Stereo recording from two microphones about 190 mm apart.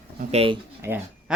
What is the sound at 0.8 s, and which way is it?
Speech, 10° right (ahead or behind).